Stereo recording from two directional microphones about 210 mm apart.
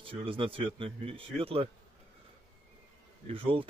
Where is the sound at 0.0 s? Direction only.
25° right (ahead or behind).